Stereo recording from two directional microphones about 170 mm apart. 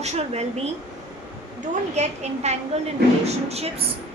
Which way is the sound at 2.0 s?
40° right (ahead or behind).